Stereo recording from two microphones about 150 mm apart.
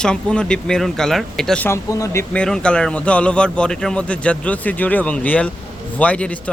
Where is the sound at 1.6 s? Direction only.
20° left (ahead or behind).